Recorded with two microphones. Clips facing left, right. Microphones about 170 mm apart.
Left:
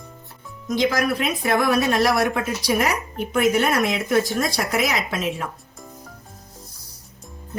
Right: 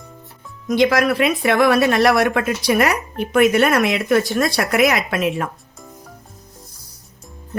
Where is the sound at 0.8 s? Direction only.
85° right.